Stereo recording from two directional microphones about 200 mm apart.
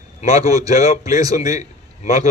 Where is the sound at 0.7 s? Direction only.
35° left (ahead or behind).